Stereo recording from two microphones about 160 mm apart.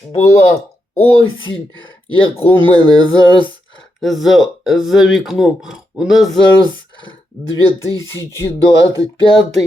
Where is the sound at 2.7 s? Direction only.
30° left (ahead or behind).